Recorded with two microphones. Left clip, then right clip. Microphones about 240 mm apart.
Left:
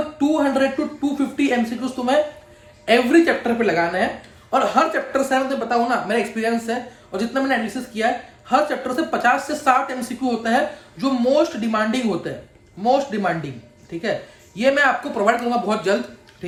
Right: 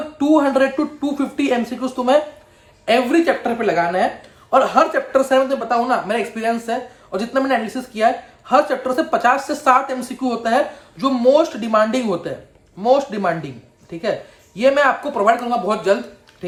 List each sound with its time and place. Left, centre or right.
0.2 s speech: right